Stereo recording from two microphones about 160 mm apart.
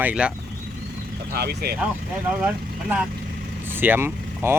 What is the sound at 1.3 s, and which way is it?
Speech, 80° right.